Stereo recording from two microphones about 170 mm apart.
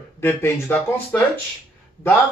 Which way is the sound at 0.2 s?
10° left (ahead or behind).